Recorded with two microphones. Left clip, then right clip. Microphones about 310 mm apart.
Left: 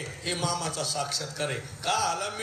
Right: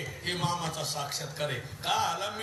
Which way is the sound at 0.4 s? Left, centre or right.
Left.